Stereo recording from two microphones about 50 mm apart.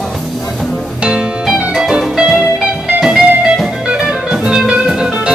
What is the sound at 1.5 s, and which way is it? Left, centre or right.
Music, centre.